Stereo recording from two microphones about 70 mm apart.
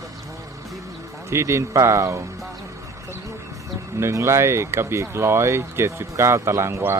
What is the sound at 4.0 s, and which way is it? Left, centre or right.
Speech, right.